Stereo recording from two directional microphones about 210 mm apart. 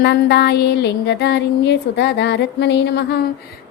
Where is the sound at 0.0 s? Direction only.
55° left (ahead or behind).